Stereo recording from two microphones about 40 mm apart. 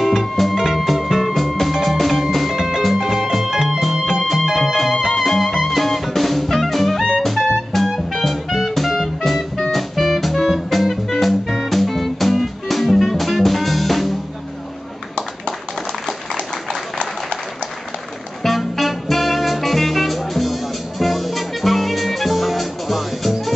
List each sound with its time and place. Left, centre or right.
0.0 s music: centre
18.4 s music: centre